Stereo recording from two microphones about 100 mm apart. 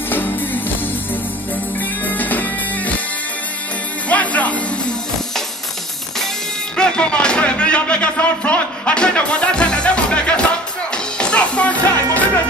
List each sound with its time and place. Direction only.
2.0 s music: 15° left (ahead or behind)
4.1 s music: 15° left (ahead or behind)
6.8 s a sound: 10° left (ahead or behind)
11.1 s music: 10° left (ahead or behind)